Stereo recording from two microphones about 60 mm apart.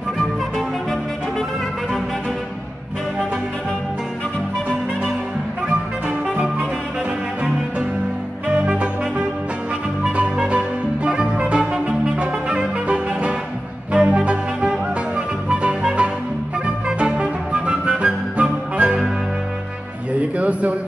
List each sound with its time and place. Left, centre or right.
5.7 s music: centre
8.5 s music: centre
10.1 s music: centre
20.2 s music: right